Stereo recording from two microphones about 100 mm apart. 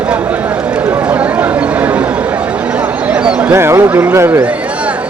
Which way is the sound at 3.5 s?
25° right (ahead or behind).